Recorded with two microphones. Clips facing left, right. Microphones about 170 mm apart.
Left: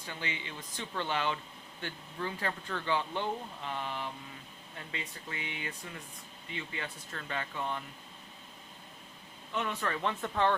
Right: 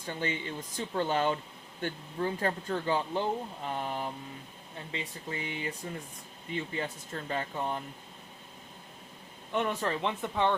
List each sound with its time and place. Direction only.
0.0 s speech: 45° right (ahead or behind)
9.5 s speech: 50° right (ahead or behind)
9.8 s speech: 20° right (ahead or behind)